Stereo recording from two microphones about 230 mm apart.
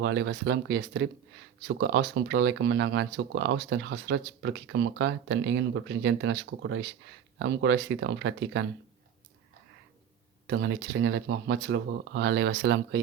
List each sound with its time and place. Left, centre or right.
0.0 s speech: right
10.4 s speech: right